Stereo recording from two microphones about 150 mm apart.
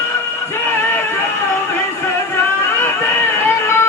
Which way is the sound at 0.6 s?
15° left (ahead or behind).